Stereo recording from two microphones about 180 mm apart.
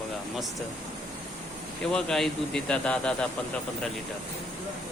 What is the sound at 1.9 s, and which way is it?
Speech, 5° left (ahead or behind).